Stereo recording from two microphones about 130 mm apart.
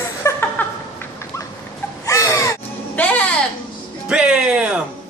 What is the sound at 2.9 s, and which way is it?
Music, 10° left (ahead or behind).